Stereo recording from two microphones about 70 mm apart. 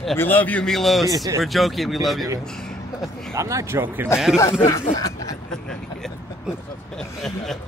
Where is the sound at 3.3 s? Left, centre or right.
Right.